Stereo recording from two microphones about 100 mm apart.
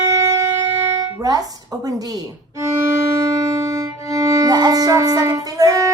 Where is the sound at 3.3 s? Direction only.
30° right (ahead or behind).